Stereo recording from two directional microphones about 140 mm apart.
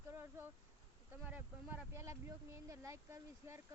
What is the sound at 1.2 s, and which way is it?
Speech, 15° right (ahead or behind).